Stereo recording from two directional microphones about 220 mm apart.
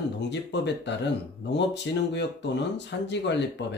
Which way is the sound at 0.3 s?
50° left (ahead or behind).